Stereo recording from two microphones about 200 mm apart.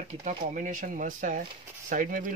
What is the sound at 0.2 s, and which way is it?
Speech, 40° right (ahead or behind).